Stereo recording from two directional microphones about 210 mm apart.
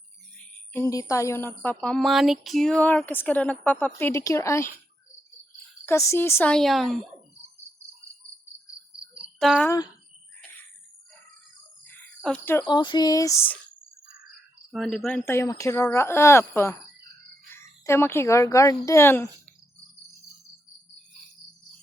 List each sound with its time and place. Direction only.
0.3 s speech: 10° left (ahead or behind)
5.8 s speech: 15° left (ahead or behind)
9.4 s speech: centre (ahead or behind)
11.9 s a sound: 5° left (ahead or behind)
12.6 s speech: 20° left (ahead or behind)
14.7 s speech: centre (ahead or behind)